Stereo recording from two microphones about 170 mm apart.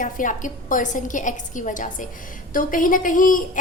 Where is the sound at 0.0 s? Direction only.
50° left (ahead or behind).